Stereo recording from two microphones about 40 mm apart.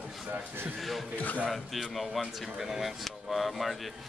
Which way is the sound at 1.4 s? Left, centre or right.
Centre.